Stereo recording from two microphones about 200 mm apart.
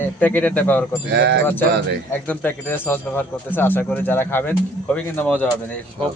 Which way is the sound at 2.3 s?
10° left (ahead or behind).